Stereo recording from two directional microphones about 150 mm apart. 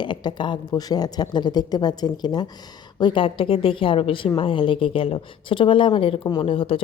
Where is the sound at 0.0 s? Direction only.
30° left (ahead or behind).